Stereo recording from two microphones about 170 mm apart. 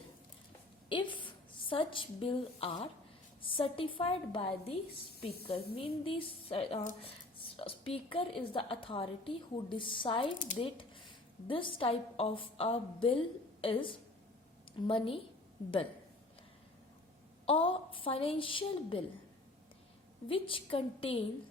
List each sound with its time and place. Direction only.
0.9 s a woman's voice: 30° left (ahead or behind)
10.3 s speech: 50° left (ahead or behind)
10.6 s a woman's voice: 30° left (ahead or behind)
17.4 s speech: 30° left (ahead or behind)
20.2 s speech: 30° left (ahead or behind)